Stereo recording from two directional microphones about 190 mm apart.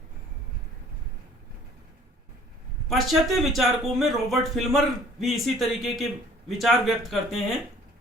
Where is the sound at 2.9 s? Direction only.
Centre (ahead or behind).